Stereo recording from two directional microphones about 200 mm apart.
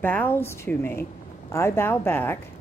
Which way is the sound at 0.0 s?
10° left (ahead or behind).